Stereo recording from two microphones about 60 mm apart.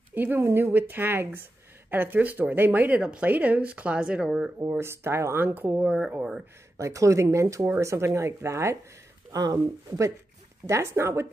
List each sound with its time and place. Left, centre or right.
0.1 s speech: right
0.4 s speech: right
0.7 s a woman's voice: right
3.0 s a woman's voice: centre
4.6 s speech: right
5.4 s a woman's voice: right
5.9 s speech: centre
6.8 s speech: right
9.3 s speech: right
10.7 s speech: right